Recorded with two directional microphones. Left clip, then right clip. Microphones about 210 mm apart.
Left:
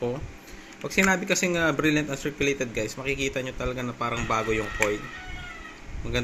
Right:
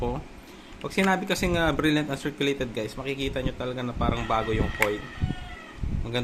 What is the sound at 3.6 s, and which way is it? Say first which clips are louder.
A man's voice: even; 10° left (ahead or behind).